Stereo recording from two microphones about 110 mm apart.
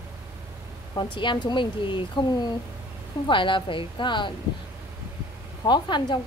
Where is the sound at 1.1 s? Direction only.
45° left (ahead or behind).